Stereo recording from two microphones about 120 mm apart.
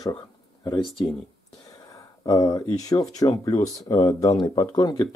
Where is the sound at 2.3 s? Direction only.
35° left (ahead or behind).